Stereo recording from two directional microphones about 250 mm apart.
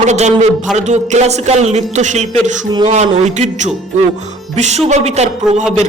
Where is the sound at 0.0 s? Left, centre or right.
Right.